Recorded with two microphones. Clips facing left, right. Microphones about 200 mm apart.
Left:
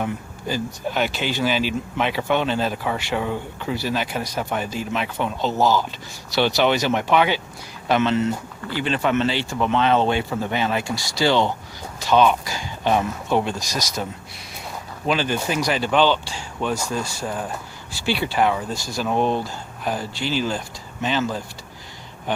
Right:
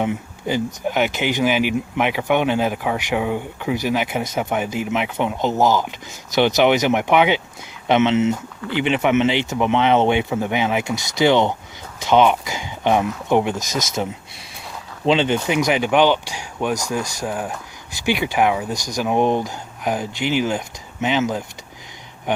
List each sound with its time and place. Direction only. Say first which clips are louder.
0.4 s speech: right 4 dB; 20° right (ahead or behind)